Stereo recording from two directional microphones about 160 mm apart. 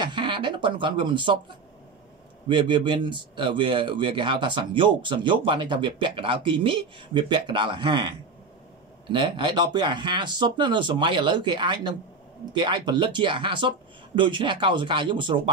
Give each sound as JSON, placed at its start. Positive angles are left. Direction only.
{"t": 0.0, "sound": "speech", "side_deg": -30}
{"t": 2.4, "sound": "speech", "side_deg": -30}
{"t": 9.1, "sound": "speech", "side_deg": -30}